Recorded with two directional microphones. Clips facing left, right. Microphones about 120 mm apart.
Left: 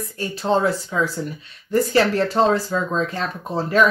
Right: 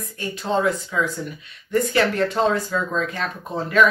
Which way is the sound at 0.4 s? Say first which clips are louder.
Left 2 dB; 30° left (ahead or behind).